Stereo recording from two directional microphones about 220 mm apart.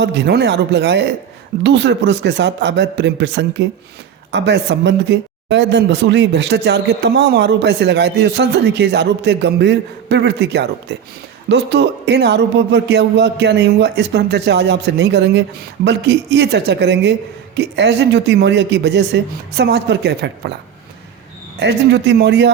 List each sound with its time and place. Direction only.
0.0 s speech: 50° right (ahead or behind)
21.6 s speech: 50° right (ahead or behind)